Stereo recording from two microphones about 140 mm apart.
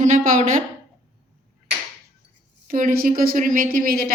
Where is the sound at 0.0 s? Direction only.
60° right (ahead or behind).